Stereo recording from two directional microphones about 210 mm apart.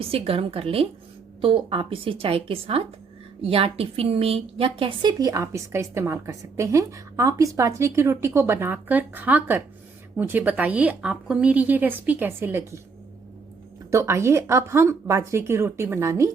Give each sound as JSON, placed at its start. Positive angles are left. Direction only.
{"t": 0.1, "sound": "a woman's voice", "side_deg": -25}
{"t": 13.9, "sound": "a woman's voice", "side_deg": -15}